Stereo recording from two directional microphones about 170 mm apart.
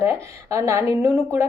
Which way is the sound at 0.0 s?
15° right (ahead or behind).